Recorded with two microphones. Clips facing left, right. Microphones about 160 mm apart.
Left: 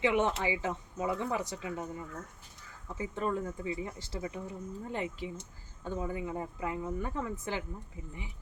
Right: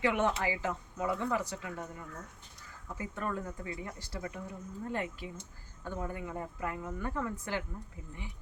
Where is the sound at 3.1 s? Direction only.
20° left (ahead or behind).